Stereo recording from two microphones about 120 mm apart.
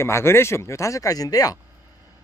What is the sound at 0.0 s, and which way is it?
Speech, 20° left (ahead or behind).